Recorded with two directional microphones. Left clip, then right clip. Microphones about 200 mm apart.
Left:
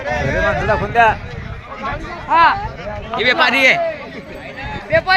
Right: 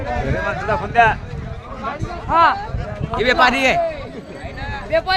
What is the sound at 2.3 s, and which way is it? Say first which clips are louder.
Speech: left 2 dB; 40° right (ahead or behind).